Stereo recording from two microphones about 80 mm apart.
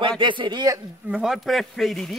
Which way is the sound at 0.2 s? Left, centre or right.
Right.